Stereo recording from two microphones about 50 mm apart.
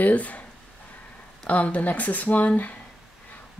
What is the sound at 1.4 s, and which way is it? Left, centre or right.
Speech, left.